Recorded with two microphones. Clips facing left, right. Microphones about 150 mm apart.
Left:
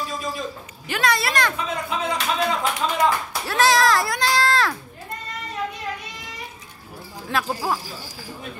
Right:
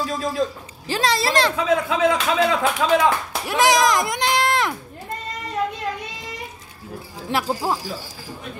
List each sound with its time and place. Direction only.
0.0 s a sound: 90° right
0.8 s speech: 30° right (ahead or behind)
1.6 s a man's voice: 90° right
3.4 s speech: 15° right (ahead or behind)
7.2 s speech: 25° right (ahead or behind)